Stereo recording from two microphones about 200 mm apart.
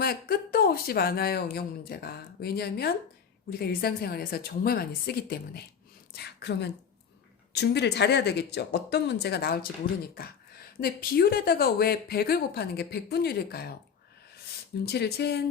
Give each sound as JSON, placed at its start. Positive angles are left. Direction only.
{"t": 0.0, "sound": "a woman's voice", "side_deg": 50}
{"t": 14.8, "sound": "speech", "side_deg": 55}